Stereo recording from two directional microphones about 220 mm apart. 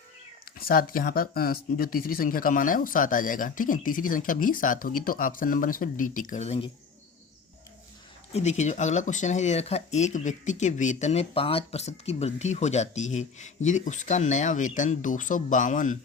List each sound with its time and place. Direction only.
0.6 s speech: 40° left (ahead or behind)
8.3 s speech: 30° left (ahead or behind)